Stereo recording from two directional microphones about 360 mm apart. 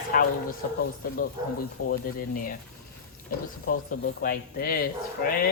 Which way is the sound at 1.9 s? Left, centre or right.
Left.